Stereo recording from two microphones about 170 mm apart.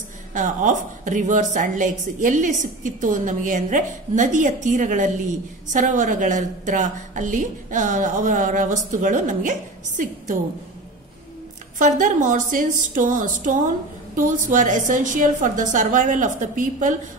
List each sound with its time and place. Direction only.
0.3 s a woman's voice: 50° right (ahead or behind)
11.8 s a woman's voice: 50° right (ahead or behind)